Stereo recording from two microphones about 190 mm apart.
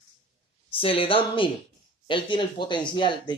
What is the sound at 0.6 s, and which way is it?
Speech, 30° left (ahead or behind).